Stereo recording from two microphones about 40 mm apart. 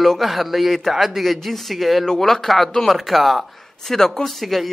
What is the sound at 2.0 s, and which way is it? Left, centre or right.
Speech, centre.